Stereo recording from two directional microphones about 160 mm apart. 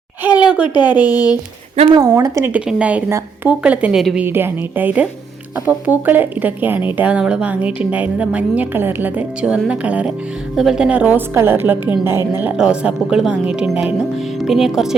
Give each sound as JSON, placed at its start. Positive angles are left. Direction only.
{"t": 0.3, "sound": "speech", "side_deg": -10}
{"t": 1.0, "sound": "speech", "side_deg": 25}
{"t": 1.9, "sound": "speech", "side_deg": -20}